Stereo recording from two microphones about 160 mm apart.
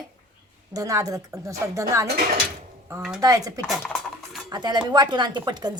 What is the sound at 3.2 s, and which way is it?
Speech, 20° right (ahead or behind).